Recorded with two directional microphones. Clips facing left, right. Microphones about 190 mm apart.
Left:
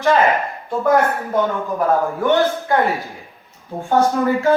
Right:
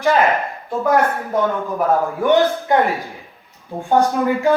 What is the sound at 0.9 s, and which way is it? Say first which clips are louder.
Speech: left 1 dB; centre (ahead or behind).